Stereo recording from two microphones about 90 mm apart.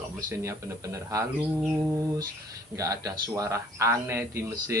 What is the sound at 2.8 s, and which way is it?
Speech, 40° right (ahead or behind).